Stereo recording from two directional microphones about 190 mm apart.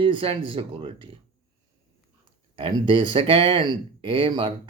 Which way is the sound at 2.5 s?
25° right (ahead or behind).